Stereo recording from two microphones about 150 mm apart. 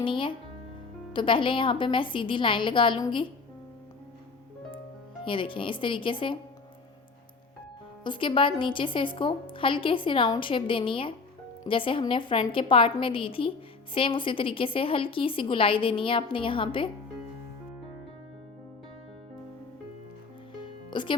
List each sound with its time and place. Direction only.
0.0 s a woman's voice: 35° left (ahead or behind)
5.2 s a woman's voice: 35° left (ahead or behind)
8.0 s a woman's voice: 35° left (ahead or behind)
20.6 s music: 30° left (ahead or behind)